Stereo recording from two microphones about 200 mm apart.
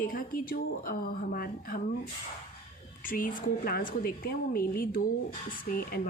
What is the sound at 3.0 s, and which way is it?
Speech, 45° left (ahead or behind).